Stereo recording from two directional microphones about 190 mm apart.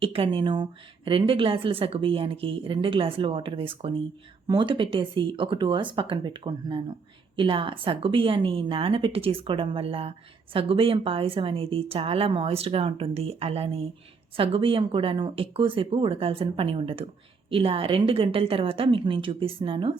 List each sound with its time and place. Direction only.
0.0 s a woman's voice: 30° right (ahead or behind)